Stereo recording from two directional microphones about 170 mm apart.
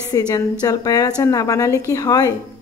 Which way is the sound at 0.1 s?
20° left (ahead or behind).